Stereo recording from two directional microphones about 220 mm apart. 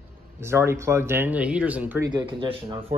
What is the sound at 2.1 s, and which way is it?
Speech, 20° right (ahead or behind).